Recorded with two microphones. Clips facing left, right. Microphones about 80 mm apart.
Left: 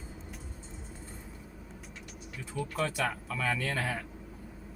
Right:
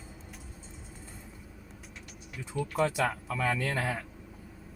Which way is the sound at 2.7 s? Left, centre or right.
Centre.